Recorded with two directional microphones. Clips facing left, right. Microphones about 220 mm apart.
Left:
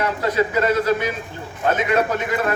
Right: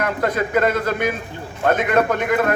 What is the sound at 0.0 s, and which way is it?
A man's voice, 50° right (ahead or behind).